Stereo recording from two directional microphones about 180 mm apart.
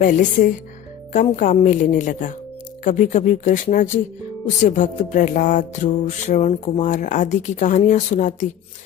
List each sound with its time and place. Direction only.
0.0 s music: 50° left (ahead or behind)